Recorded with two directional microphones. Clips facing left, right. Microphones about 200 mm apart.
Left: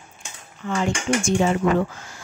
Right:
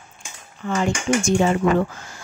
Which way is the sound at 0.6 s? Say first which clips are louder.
Right 2 dB; 50° right (ahead or behind).